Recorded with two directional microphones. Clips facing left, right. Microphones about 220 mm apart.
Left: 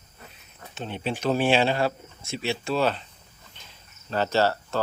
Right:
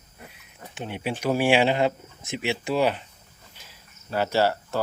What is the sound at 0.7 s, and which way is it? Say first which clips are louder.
Speech: even; 15° right (ahead or behind).